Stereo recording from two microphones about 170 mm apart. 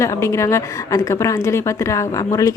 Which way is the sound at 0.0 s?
15° left (ahead or behind).